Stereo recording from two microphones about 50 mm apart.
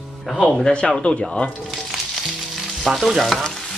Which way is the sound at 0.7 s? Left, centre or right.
Left.